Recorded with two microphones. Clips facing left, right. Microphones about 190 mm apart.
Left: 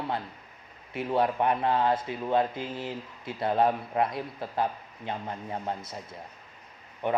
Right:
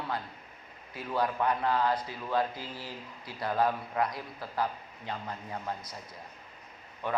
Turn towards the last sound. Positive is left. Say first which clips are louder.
# left 4 dB
turn(degrees=20)  # may be behind; listen again after turning